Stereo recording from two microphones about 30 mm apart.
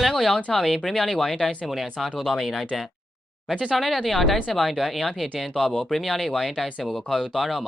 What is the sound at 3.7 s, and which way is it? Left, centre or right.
Speech, centre.